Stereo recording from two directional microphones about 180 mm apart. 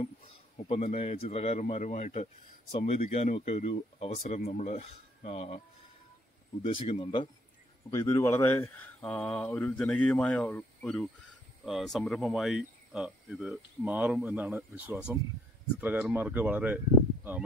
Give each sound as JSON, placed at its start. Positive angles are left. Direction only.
{"t": 0.7, "sound": "speech", "side_deg": 35}
{"t": 6.6, "sound": "speech", "side_deg": 30}